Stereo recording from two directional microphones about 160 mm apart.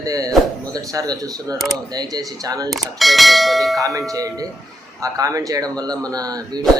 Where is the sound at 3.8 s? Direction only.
20° right (ahead or behind).